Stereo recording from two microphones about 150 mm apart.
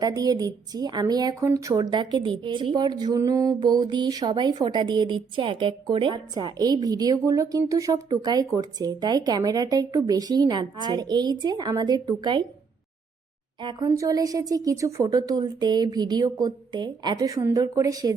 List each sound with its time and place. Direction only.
0.0 s a woman's voice: 25° right (ahead or behind)
13.6 s a woman's voice: 30° right (ahead or behind)